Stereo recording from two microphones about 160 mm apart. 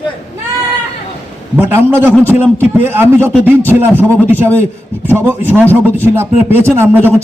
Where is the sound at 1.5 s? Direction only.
15° right (ahead or behind).